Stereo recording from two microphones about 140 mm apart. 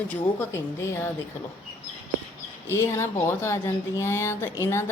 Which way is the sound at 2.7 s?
20° left (ahead or behind).